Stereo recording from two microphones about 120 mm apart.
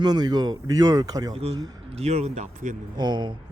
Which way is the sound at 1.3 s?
60° right (ahead or behind).